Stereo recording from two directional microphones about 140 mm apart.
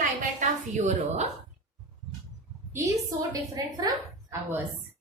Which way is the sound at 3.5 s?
30° right (ahead or behind).